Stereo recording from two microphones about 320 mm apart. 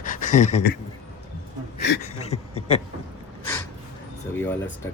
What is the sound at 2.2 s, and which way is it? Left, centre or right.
Speech, centre.